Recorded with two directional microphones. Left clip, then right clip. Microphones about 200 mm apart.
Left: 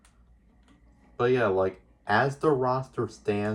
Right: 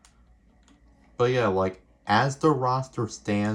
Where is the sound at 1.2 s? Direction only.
45° right (ahead or behind).